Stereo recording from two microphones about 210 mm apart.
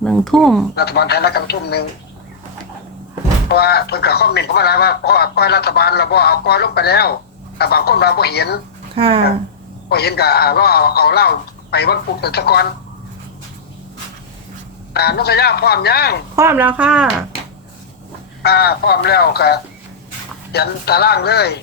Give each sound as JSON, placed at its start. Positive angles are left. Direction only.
{"t": 0.0, "sound": "speech", "side_deg": 0}
{"t": 0.8, "sound": "speech", "side_deg": 50}
{"t": 3.5, "sound": "speech", "side_deg": 50}
{"t": 9.0, "sound": "speech", "side_deg": -25}
{"t": 9.9, "sound": "speech", "side_deg": 50}
{"t": 14.9, "sound": "speech", "side_deg": 50}
{"t": 16.3, "sound": "speech", "side_deg": -15}
{"t": 18.4, "sound": "speech", "side_deg": 50}